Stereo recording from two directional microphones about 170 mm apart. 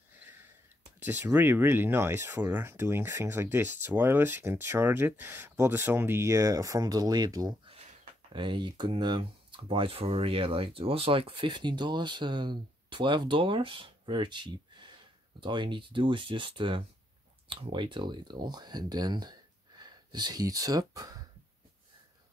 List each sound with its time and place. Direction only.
0.9 s speech: 15° right (ahead or behind)
7.7 s a sound: 40° right (ahead or behind)
8.3 s speech: 30° right (ahead or behind)